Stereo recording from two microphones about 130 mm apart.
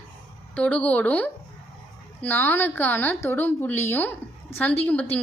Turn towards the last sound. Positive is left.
turn(degrees=10)  # may be behind; listen again after turning